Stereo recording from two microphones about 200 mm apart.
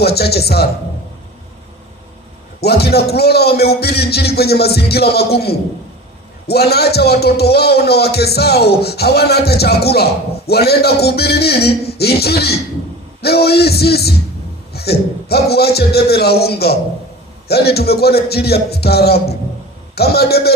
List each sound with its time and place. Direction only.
0.0 s a man's voice: 55° left (ahead or behind)
2.6 s a man's voice: 55° left (ahead or behind)